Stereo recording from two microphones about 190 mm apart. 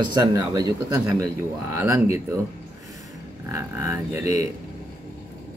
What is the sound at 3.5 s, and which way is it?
Speech, 15° right (ahead or behind).